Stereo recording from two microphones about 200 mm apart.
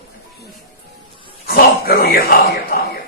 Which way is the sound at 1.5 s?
50° left (ahead or behind).